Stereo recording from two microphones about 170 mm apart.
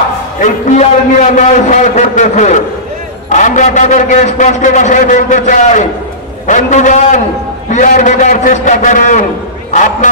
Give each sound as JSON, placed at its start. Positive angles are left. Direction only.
{"t": 0.4, "sound": "a man's voice", "side_deg": 45}